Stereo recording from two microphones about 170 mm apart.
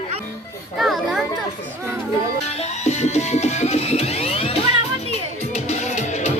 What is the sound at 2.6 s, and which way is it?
Music, 40° left (ahead or behind).